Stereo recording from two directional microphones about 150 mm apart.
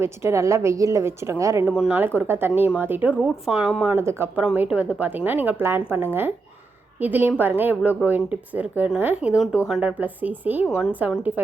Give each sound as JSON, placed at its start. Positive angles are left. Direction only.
{"t": 0.0, "sound": "a woman's voice", "side_deg": -15}
{"t": 1.6, "sound": "a woman's voice", "side_deg": -5}
{"t": 3.9, "sound": "a woman's voice", "side_deg": -15}
{"t": 7.0, "sound": "a woman's voice", "side_deg": -15}